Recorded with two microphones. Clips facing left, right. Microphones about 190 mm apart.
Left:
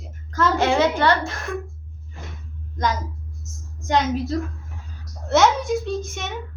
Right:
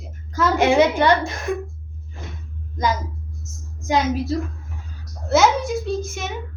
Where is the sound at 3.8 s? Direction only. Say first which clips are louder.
Right 1 dB; 5° right (ahead or behind).